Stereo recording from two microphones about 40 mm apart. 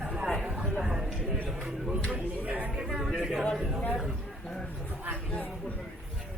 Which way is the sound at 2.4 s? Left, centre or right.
Right.